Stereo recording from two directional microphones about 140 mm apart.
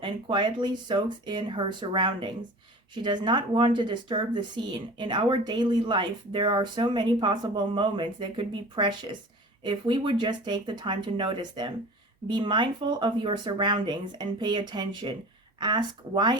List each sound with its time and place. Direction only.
0.0 s speech: 35° right (ahead or behind)